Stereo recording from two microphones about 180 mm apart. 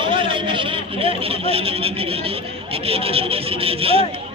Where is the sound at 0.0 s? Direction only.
30° right (ahead or behind).